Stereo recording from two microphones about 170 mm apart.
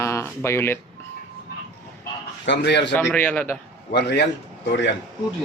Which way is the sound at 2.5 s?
90° left.